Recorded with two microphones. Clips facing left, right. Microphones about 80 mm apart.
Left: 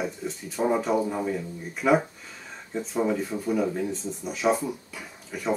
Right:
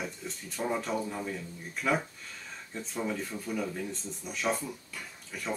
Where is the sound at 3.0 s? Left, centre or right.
Centre.